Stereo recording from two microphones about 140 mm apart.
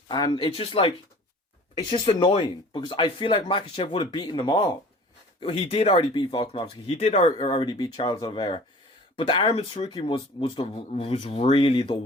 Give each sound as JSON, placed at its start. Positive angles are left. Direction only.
{"t": 0.1, "sound": "speech", "side_deg": 30}
{"t": 5.4, "sound": "speech", "side_deg": 45}